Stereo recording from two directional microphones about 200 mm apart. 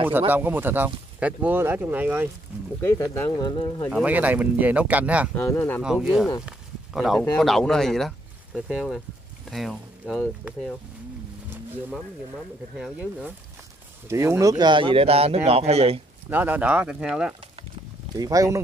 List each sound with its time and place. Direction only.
0.3 s speech: 10° right (ahead or behind)
2.8 s speech: 15° left (ahead or behind)
3.9 s speech: 5° right (ahead or behind)
5.3 s speech: 10° left (ahead or behind)
5.8 s speech: centre (ahead or behind)
6.4 s a sound: centre (ahead or behind)
7.3 s speech: centre (ahead or behind)
12.7 s speech: 5° right (ahead or behind); by 16.0 s 30° right (ahead or behind)
16.3 s speech: 10° right (ahead or behind)
18.1 s speech: 15° right (ahead or behind)